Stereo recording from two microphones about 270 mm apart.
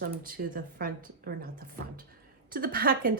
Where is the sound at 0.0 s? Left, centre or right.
Right.